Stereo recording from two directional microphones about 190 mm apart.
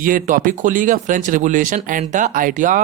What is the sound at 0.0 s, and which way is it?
Speech, 45° right (ahead or behind).